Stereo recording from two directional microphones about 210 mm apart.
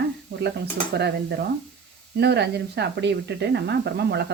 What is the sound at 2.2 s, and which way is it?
Speech, 50° right (ahead or behind).